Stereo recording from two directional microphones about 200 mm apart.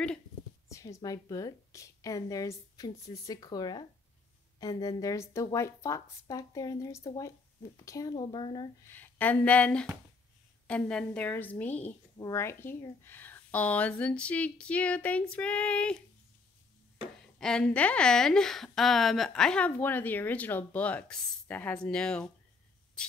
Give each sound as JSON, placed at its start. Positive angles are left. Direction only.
{"t": 0.7, "sound": "speech", "side_deg": 15}
{"t": 8.9, "sound": "speech", "side_deg": 10}
{"t": 17.4, "sound": "a woman's voice", "side_deg": 5}